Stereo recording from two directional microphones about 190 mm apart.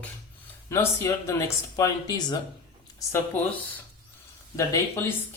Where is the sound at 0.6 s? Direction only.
15° left (ahead or behind).